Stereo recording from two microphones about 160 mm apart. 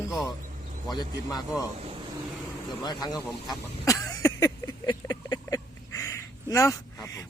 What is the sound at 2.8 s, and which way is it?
Speech, 25° left (ahead or behind).